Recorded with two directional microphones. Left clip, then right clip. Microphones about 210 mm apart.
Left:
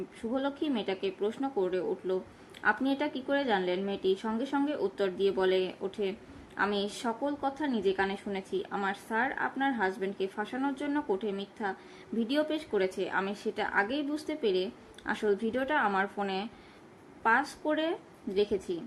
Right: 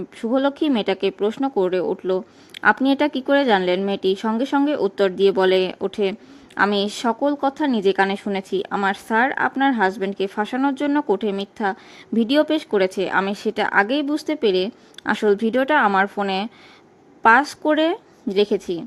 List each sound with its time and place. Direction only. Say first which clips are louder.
0.2 s speech: right 13 dB; 50° right (ahead or behind)